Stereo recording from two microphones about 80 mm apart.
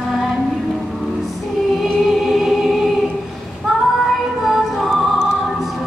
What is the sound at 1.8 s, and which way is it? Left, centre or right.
Music, centre.